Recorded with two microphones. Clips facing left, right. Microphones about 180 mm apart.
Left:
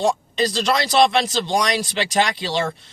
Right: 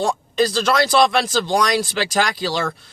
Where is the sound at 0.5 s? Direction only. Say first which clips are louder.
Even; 20° left (ahead or behind).